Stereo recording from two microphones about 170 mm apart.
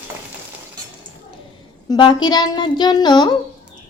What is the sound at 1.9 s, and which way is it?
Frying, 25° left (ahead or behind).